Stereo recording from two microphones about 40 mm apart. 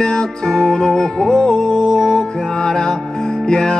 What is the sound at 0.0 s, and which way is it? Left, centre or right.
Music, left.